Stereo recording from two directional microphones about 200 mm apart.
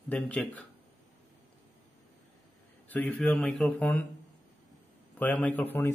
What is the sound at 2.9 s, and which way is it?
Speech, 5° left (ahead or behind).